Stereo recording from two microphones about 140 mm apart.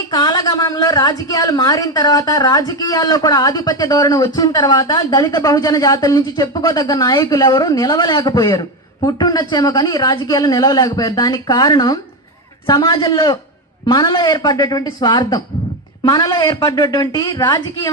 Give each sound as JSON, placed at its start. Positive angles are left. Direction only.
{"t": 0.1, "sound": "a woman's voice", "side_deg": 30}